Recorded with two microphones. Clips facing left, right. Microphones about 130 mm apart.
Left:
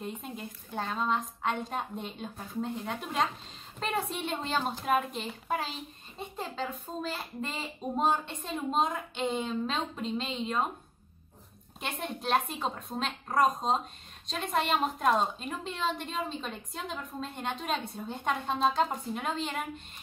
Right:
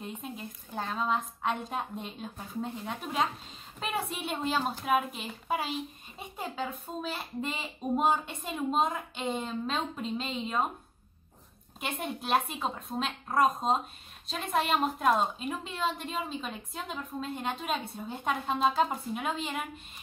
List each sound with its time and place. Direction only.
0.0 s a woman's voice: centre (ahead or behind)
11.8 s a woman's voice: 5° right (ahead or behind)